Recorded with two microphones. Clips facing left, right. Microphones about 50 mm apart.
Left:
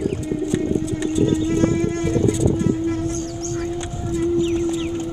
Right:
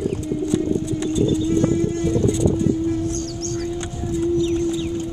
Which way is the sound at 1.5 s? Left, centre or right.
Left.